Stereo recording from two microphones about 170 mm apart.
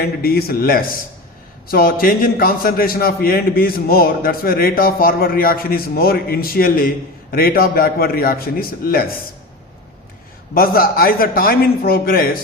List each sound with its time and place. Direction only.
0.0 s a man's voice: 60° left (ahead or behind)
10.5 s a man's voice: 60° left (ahead or behind)